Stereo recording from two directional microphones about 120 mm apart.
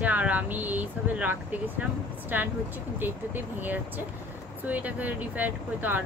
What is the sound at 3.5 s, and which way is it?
Speech, 15° right (ahead or behind).